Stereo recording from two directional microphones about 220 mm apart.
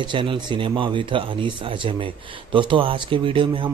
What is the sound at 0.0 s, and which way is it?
Speech, 20° right (ahead or behind).